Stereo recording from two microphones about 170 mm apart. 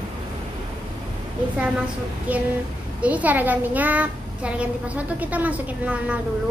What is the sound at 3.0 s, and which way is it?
A child's voice, 10° right (ahead or behind).